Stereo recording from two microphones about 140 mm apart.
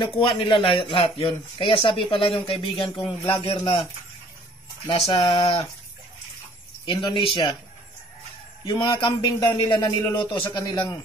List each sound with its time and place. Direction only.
0.0 s speech: 35° left (ahead or behind)
4.8 s speech: 40° left (ahead or behind)
6.9 s speech: 35° left (ahead or behind)
8.7 s speech: 35° left (ahead or behind)
9.4 s a man's voice: 20° left (ahead or behind)